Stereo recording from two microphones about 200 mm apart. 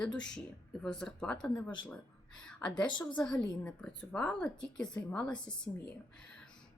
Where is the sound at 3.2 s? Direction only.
5° left (ahead or behind).